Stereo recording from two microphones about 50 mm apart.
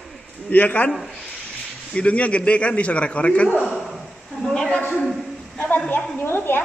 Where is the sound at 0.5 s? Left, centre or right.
Left.